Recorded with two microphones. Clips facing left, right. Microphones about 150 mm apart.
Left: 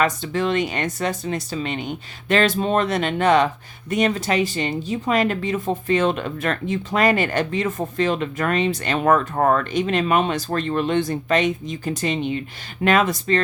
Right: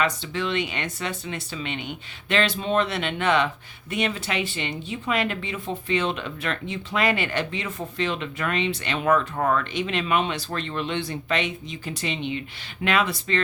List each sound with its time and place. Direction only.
0.0 s speech: 45° left (ahead or behind)